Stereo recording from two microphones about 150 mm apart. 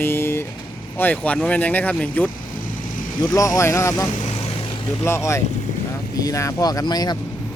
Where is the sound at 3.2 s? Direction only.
20° left (ahead or behind).